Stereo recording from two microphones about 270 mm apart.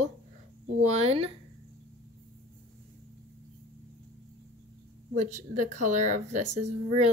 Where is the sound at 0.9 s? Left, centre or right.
Right.